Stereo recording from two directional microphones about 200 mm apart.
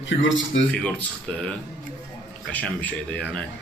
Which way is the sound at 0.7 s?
5° left (ahead or behind).